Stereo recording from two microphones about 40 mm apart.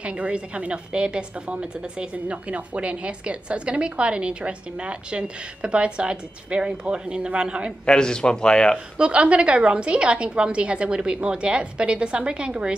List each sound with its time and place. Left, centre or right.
0.0 s a woman's voice: right
7.8 s speech: left
8.9 s a woman's voice: right